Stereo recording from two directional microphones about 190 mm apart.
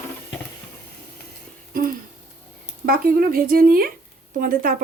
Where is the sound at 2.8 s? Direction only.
50° right (ahead or behind).